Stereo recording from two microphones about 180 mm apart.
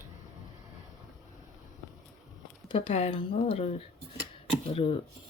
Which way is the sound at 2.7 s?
30° left (ahead or behind).